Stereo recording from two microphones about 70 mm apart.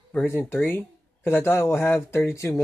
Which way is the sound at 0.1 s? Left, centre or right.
Left.